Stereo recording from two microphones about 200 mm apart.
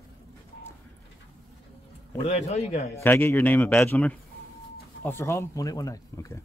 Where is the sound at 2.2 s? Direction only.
30° left (ahead or behind).